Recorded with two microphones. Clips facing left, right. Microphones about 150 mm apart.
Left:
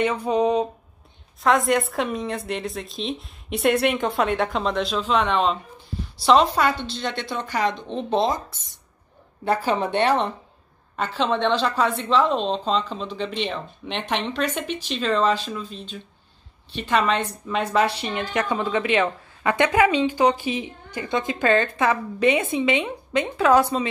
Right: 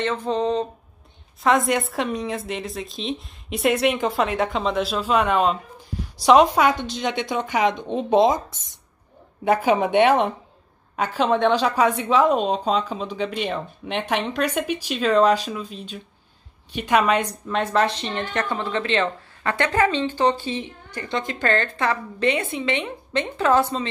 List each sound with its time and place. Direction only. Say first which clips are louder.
0.0 s a woman's voice: left 2 dB; 10° left (ahead or behind)
1.4 s a woman's voice: even; centre (ahead or behind)
17.5 s a woman's voice: even; 5° left (ahead or behind)